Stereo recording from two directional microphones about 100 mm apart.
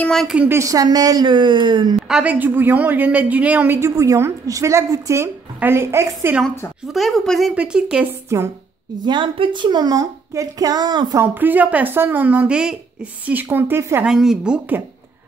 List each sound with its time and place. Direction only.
0.5 s a woman's voice: 30° right (ahead or behind); by 2.0 s 50° right (ahead or behind)
2.0 s a sound: 5° right (ahead or behind)
2.2 s a woman's voice: 15° right (ahead or behind)
6.9 s speech: centre (ahead or behind)
7.5 s a woman's voice: 10° right (ahead or behind)
8.3 s a woman's voice: 30° right (ahead or behind)
9.0 s a woman's voice: 55° right (ahead or behind)
11.1 s a woman's voice: 20° right (ahead or behind)
13.3 s a woman's voice: 20° right (ahead or behind)
14.0 s a woman's voice: 5° right (ahead or behind)